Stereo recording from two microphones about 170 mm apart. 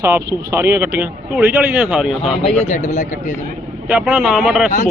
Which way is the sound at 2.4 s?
40° left (ahead or behind).